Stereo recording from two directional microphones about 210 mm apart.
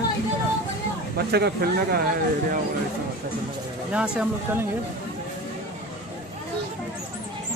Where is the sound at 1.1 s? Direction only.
50° right (ahead or behind).